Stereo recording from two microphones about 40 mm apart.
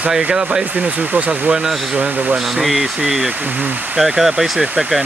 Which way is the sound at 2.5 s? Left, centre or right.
Centre.